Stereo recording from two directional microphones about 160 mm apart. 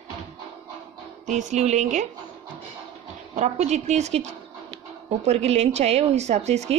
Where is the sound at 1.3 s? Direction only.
50° right (ahead or behind).